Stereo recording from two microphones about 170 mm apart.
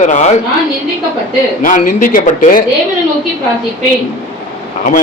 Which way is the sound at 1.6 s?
50° left (ahead or behind).